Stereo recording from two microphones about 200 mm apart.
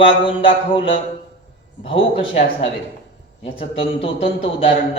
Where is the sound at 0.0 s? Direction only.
25° left (ahead or behind).